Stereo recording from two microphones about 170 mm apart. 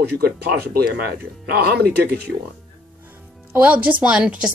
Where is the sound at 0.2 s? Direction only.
65° right (ahead or behind).